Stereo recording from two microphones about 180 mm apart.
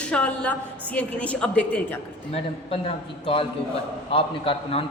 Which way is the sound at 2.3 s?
30° left (ahead or behind).